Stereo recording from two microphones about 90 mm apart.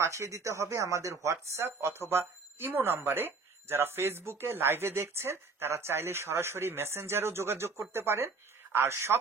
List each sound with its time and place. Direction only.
0.0 s speech: 35° right (ahead or behind)